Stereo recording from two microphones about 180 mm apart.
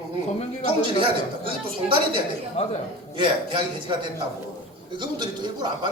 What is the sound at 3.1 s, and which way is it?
Speech, 25° right (ahead or behind).